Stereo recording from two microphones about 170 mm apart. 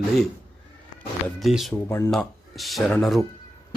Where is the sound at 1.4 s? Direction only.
Centre (ahead or behind).